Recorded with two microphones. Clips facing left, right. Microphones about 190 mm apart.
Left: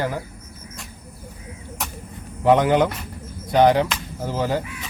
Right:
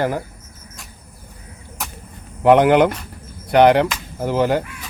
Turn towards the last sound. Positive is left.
turn(degrees=-65)  # may be behind; listen again after turning